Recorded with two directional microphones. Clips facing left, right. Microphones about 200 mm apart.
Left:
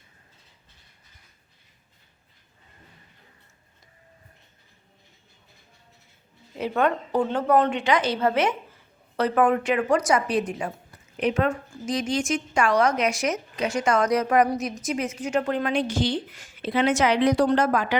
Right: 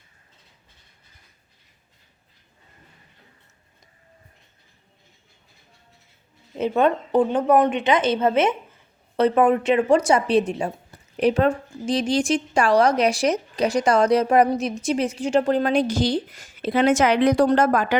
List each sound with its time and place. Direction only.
6.6 s a woman's voice: 20° right (ahead or behind); by 17.9 s 45° right (ahead or behind)